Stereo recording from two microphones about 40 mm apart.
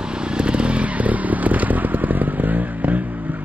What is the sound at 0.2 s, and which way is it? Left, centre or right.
Vehicle, right.